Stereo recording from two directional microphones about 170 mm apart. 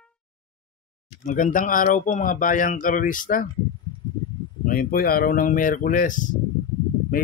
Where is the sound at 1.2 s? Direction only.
50° left (ahead or behind).